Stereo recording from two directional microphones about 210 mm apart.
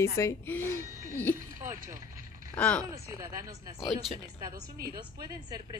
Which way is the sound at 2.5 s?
5° left (ahead or behind).